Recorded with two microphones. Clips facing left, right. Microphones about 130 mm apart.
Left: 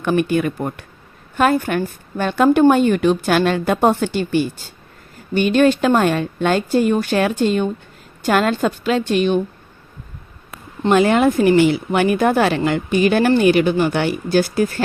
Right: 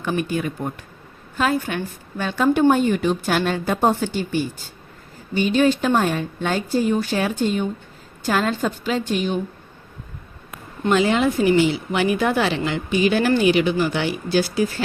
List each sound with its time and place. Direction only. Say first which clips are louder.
0.0 s a woman's voice: left 6 dB; 65° left (ahead or behind)
1.4 s a woman's voice: left 5 dB; 55° left (ahead or behind); by 4.4 s 75° left (ahead or behind)
5.3 s a woman's voice: left 4 dB; 65° left (ahead or behind)
8.2 s a woman's voice: left 4 dB; 70° left (ahead or behind)
10.9 s a woman's voice: left 4 dB; 55° left (ahead or behind)